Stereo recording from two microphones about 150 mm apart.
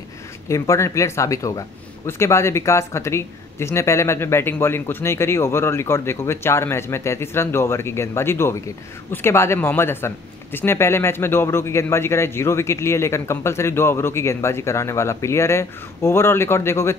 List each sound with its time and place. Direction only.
0.5 s speech: 20° left (ahead or behind)